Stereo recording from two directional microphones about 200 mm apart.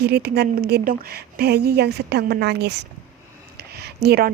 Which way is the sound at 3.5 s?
55° right (ahead or behind).